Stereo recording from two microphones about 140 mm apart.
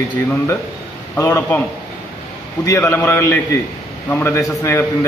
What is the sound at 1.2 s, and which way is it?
Speech, 15° left (ahead or behind).